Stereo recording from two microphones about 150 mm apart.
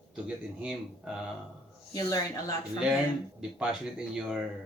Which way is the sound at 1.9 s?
25° left (ahead or behind).